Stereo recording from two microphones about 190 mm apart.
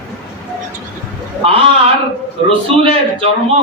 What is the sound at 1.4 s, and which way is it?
A man's voice, 30° right (ahead or behind).